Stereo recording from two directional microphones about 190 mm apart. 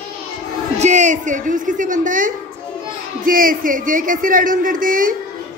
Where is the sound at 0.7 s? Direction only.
40° right (ahead or behind).